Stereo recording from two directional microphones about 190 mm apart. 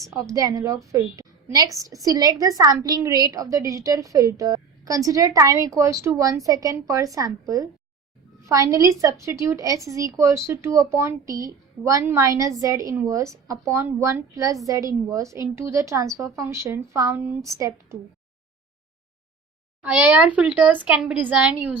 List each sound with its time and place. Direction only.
0.1 s a woman's voice: 15° right (ahead or behind)
19.8 s a woman's voice: 5° right (ahead or behind)